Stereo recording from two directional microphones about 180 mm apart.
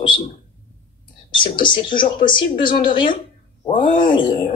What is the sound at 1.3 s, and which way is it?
Speech, 25° left (ahead or behind).